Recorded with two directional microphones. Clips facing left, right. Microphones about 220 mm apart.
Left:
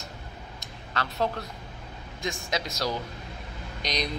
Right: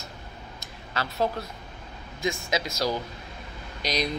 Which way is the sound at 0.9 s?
5° right (ahead or behind).